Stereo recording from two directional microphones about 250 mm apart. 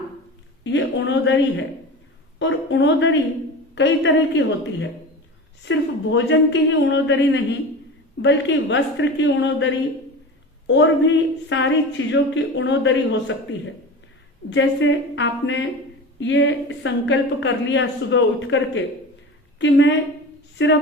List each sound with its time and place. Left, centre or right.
0.6 s a woman's voice: left
14.5 s a woman's voice: left